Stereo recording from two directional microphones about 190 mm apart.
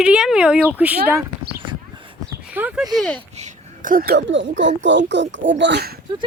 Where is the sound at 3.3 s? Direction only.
40° right (ahead or behind); by 5.9 s 65° right (ahead or behind).